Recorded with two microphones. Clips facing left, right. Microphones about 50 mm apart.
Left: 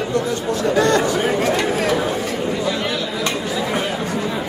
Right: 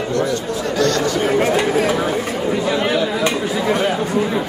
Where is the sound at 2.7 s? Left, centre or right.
Right.